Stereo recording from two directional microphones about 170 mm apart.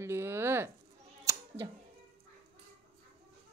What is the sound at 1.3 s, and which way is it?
Scissors, 20° right (ahead or behind).